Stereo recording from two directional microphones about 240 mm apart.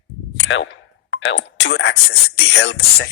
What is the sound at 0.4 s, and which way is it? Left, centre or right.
A man's voice, left.